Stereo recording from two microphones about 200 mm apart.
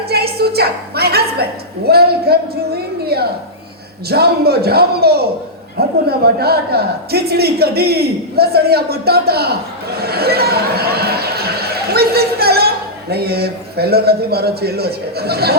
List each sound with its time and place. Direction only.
0.1 s a woman's voice: 50° right (ahead or behind)